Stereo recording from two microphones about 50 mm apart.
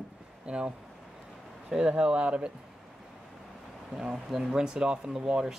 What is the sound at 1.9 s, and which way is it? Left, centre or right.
Speech, right.